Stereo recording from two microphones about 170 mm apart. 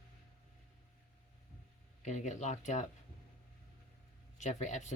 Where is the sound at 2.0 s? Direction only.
45° left (ahead or behind).